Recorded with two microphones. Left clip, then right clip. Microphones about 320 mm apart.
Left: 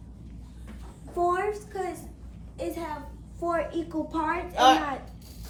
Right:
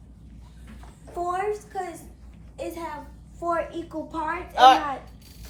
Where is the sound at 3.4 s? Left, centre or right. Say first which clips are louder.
Right 1 dB; centre.